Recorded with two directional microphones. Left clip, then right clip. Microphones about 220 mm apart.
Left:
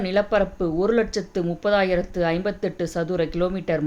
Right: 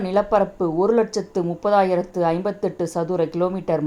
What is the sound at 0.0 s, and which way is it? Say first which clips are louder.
A woman's voice: right 2 dB; centre (ahead or behind).